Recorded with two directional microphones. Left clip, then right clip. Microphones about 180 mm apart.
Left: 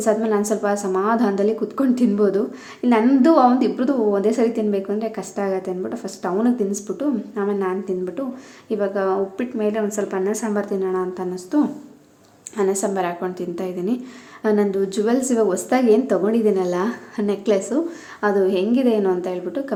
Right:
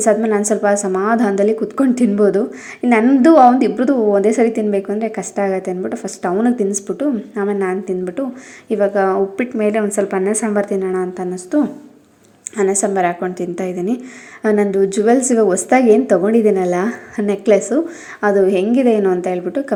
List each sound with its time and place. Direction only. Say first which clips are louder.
0.0 s a woman's voice: right 5 dB; 20° right (ahead or behind)